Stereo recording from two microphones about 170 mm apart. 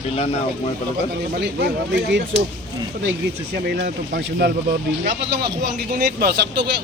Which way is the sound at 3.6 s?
70° right (ahead or behind).